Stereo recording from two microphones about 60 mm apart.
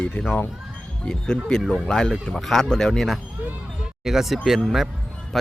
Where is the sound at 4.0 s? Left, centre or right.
Centre.